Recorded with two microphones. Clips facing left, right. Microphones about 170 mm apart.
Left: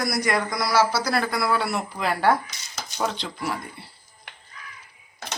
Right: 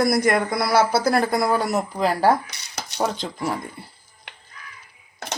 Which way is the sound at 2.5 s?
65° right (ahead or behind).